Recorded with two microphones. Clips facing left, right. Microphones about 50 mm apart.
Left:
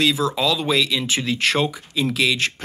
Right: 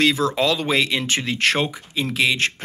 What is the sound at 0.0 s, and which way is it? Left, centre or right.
Speech, right.